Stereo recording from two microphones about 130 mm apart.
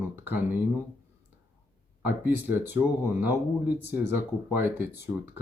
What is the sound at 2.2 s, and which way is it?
Speech, 15° right (ahead or behind).